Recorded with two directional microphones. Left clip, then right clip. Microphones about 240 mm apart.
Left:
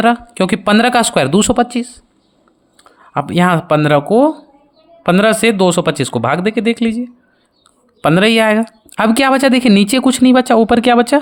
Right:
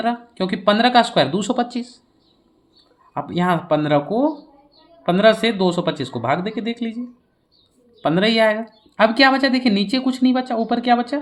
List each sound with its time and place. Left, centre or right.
0.0 s speech: left
3.1 s speech: left
8.0 s speech: left